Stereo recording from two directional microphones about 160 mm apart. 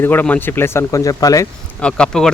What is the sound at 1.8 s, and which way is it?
Speech, 5° left (ahead or behind).